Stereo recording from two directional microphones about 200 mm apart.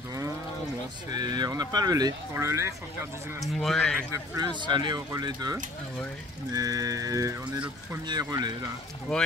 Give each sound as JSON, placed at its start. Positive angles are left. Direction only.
{"t": 1.1, "sound": "speech", "side_deg": -20}
{"t": 3.3, "sound": "speech", "side_deg": 0}
{"t": 4.1, "sound": "music", "side_deg": -15}
{"t": 4.6, "sound": "speech", "side_deg": -25}
{"t": 6.5, "sound": "music", "side_deg": -20}
{"t": 8.1, "sound": "speech", "side_deg": -20}